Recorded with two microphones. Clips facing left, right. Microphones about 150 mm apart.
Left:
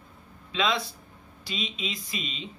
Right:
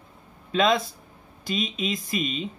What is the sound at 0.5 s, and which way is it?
Speech, 45° right (ahead or behind).